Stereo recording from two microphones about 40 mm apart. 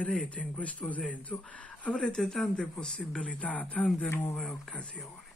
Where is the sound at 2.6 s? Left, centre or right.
Left.